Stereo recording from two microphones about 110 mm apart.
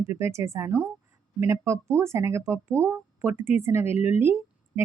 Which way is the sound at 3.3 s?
90° left.